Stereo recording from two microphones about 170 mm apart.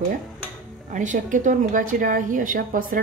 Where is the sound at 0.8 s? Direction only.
50° right (ahead or behind).